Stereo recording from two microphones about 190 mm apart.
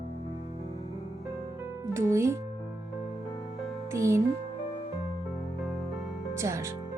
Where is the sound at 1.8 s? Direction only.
15° right (ahead or behind).